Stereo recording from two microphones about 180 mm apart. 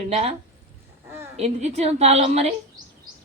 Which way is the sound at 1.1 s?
15° right (ahead or behind).